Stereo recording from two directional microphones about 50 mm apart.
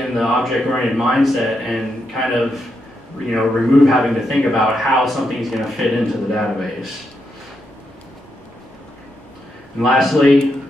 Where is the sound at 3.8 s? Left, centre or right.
Centre.